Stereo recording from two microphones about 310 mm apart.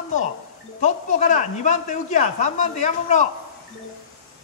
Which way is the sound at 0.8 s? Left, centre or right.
Left.